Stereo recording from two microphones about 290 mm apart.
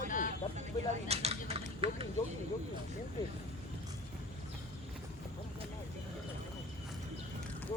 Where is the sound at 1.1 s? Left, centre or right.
Right.